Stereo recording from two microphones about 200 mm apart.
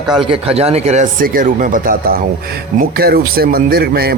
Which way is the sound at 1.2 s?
45° right (ahead or behind).